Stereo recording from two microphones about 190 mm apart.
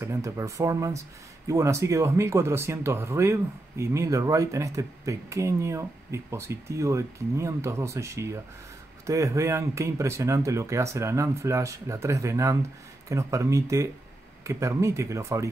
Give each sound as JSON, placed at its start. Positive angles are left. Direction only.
{"t": 0.0, "sound": "speech", "side_deg": -15}